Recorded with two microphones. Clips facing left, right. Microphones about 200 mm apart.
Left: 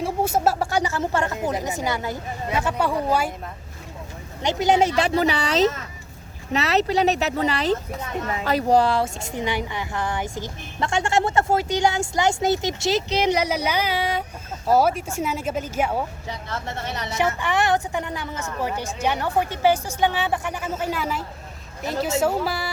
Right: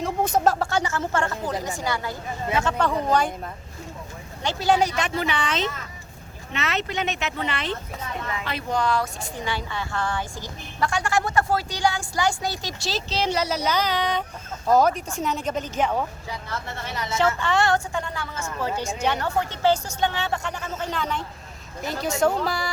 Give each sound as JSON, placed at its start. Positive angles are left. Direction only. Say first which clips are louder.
{"t": 0.0, "sound": "speech", "louder": "even", "side_deg": 10}
{"t": 4.4, "sound": "a woman's voice", "louder": "left 2 dB", "side_deg": 20}
{"t": 17.2, "sound": "speech", "louder": "right 1 dB", "side_deg": 15}
{"t": 18.8, "sound": "speech", "louder": "right 1 dB", "side_deg": -15}
{"t": 19.0, "sound": "speech", "louder": "left 3 dB", "side_deg": 15}